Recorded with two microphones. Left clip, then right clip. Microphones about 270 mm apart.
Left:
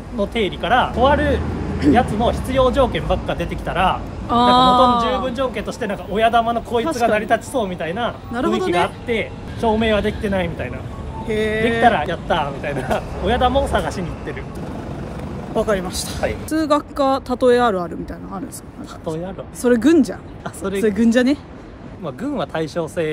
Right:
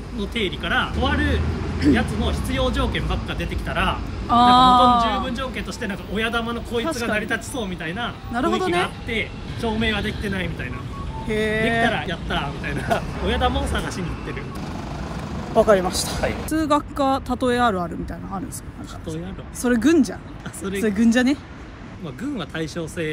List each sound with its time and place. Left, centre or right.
0.2 s speech: centre
4.3 s speech: centre
5.2 s speech: centre
8.4 s speech: centre
9.0 s speech: centre
11.2 s speech: centre
11.8 s speech: centre
15.5 s speech: centre
19.6 s speech: centre
22.0 s speech: centre